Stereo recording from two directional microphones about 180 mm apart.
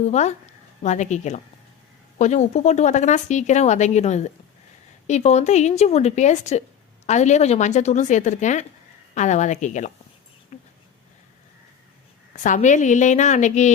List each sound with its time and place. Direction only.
0.0 s speech: 40° left (ahead or behind)
10.5 s a sound: 40° left (ahead or behind)
12.4 s a woman's voice: 45° left (ahead or behind)